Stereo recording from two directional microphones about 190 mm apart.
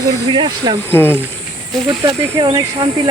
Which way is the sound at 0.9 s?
10° left (ahead or behind).